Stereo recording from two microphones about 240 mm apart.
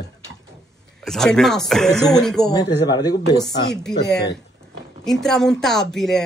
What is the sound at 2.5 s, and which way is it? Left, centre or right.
Speech, centre.